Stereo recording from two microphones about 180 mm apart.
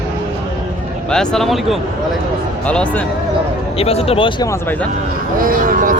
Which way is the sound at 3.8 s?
35° left (ahead or behind).